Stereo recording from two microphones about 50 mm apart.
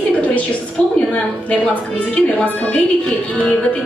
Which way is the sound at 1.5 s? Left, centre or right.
Left.